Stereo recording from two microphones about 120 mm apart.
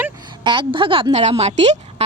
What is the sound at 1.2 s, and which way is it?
Speech, 65° right (ahead or behind).